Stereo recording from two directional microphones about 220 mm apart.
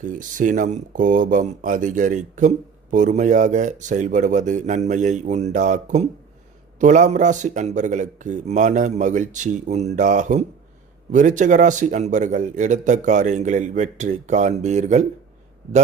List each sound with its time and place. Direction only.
0.0 s a man's voice: 35° right (ahead or behind)